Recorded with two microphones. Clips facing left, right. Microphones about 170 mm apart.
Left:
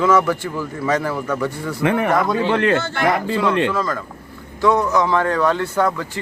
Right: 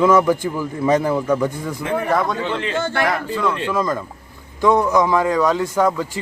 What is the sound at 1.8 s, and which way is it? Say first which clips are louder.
Speech: left 2 dB; 70° left (ahead or behind).